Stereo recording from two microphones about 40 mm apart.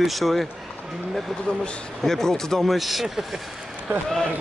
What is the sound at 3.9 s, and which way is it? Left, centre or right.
Speech, right.